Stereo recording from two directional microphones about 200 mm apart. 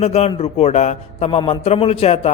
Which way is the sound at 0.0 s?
30° left (ahead or behind).